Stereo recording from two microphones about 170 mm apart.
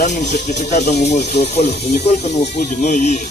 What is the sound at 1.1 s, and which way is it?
Speech, 80° left.